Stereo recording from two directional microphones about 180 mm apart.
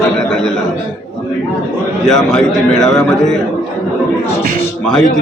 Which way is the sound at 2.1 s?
Centre (ahead or behind).